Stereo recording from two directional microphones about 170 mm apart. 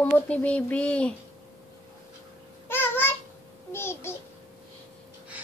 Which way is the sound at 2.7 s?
10° left (ahead or behind).